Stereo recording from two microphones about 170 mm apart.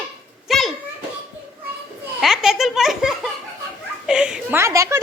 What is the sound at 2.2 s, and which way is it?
A woman's voice, centre (ahead or behind).